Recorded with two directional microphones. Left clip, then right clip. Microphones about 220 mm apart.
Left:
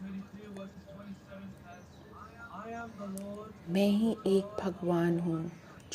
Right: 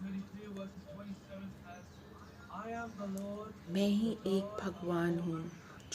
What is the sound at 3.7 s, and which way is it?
Speech, 25° left (ahead or behind).